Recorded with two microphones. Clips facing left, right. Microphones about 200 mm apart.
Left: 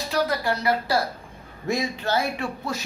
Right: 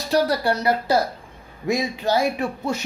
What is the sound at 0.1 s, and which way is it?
Speech, 35° right (ahead or behind).